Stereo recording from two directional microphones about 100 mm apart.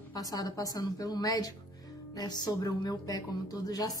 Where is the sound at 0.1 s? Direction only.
40° left (ahead or behind).